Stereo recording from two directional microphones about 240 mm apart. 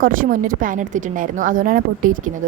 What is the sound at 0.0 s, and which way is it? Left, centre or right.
A woman's voice, right.